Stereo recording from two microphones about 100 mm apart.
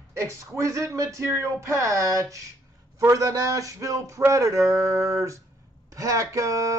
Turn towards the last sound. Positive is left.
turn(degrees=-30)  # may be behind; listen again after turning